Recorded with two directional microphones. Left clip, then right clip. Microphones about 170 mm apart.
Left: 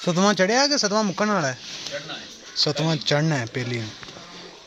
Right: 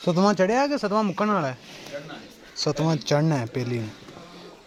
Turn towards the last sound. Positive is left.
turn(degrees=-10)  # may be behind; listen again after turning